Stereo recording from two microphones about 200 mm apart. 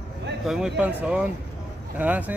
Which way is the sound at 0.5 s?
Centre (ahead or behind).